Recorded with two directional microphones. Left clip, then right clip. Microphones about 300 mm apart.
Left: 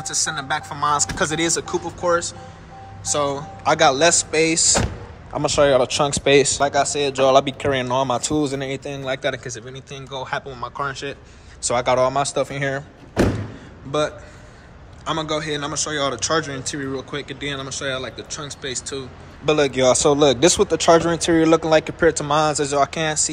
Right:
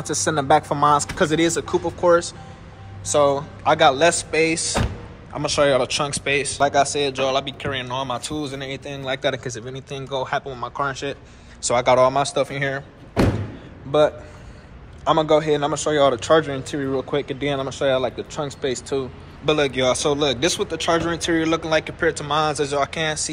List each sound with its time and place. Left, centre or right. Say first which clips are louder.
0.0 s speech: right 2 dB; centre
13.9 s speech: right 5 dB; centre
19.4 s speech: left 2 dB; centre